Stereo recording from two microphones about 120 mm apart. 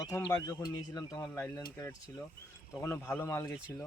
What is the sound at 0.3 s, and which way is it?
A man's voice, 30° left (ahead or behind).